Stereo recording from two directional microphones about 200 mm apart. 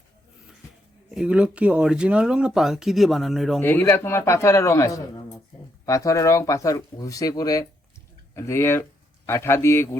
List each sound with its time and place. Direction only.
1.1 s speech: 5° right (ahead or behind)
3.6 s speech: 10° left (ahead or behind)